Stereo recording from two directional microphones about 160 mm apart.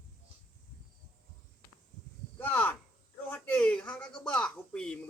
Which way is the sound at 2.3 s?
10° left (ahead or behind).